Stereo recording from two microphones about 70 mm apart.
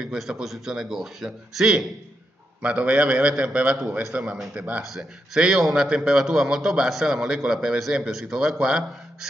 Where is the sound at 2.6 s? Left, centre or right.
Centre.